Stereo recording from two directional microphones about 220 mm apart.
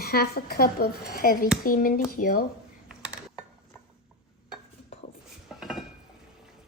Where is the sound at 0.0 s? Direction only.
45° left (ahead or behind).